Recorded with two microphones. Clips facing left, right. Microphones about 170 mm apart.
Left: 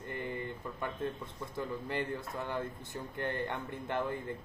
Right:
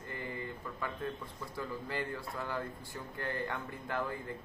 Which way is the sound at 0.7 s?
25° left (ahead or behind).